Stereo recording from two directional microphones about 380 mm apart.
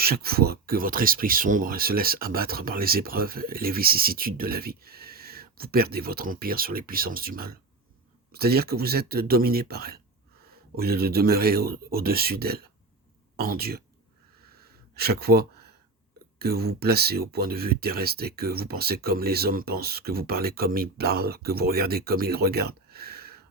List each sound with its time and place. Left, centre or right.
0.0 s speech: right
14.4 s a sound: right
16.4 s speech: right